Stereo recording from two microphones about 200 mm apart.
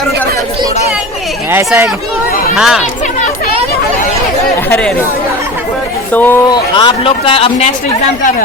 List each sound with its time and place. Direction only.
1.5 s speech: 10° right (ahead or behind)
4.7 s speech: 5° left (ahead or behind)
6.1 s speech: 10° left (ahead or behind)
6.5 s a man's voice: 20° left (ahead or behind)